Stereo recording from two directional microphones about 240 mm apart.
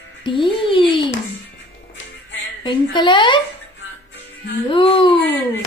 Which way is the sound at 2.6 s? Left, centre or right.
Centre.